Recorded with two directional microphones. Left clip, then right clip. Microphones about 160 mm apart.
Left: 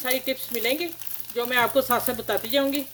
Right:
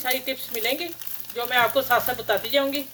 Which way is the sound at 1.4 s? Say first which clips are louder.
Right 1 dB; 90° left.